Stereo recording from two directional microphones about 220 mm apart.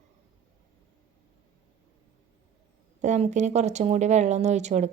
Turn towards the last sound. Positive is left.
turn(degrees=-30)  # may be behind; listen again after turning